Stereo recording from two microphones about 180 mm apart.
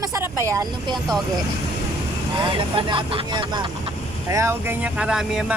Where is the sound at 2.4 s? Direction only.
25° right (ahead or behind).